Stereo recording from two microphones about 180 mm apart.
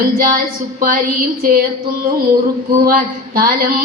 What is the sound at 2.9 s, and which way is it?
Speech, 55° right (ahead or behind).